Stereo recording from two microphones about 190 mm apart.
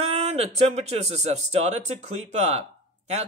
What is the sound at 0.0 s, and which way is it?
Speech, 35° right (ahead or behind).